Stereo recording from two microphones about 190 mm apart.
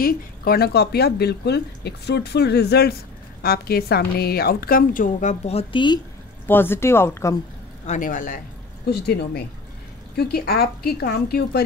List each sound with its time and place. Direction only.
0.0 s a woman's voice: 55° left (ahead or behind); by 5.9 s 25° left (ahead or behind)
6.4 s speech: 10° left (ahead or behind)
7.8 s a woman's voice: 40° left (ahead or behind)
8.9 s a woman's voice: 55° left (ahead or behind)